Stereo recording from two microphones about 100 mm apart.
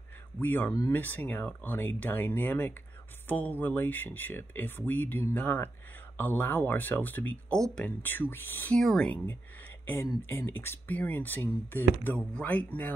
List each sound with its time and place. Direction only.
0.4 s speech: 20° left (ahead or behind)
7.5 s speech: 5° left (ahead or behind)
7.8 s speech: 20° left (ahead or behind)
8.7 s speech: 5° left (ahead or behind)
10.2 s speech: 20° left (ahead or behind)